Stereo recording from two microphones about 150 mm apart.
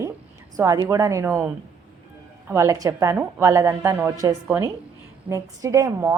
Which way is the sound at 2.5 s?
20° right (ahead or behind).